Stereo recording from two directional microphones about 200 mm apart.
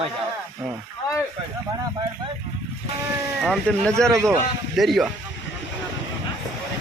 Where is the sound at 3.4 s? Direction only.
5° left (ahead or behind).